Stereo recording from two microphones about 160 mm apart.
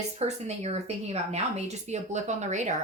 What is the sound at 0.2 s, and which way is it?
A woman's voice, 45° right (ahead or behind).